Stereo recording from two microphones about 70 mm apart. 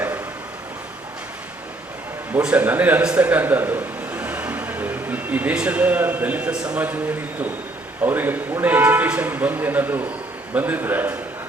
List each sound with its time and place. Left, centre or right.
2.4 s a man's voice: centre
3.0 s a man's voice: centre
3.2 s speech: right
8.0 s a man's voice: right